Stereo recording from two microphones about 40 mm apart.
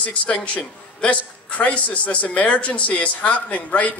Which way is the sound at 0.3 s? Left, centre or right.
Left.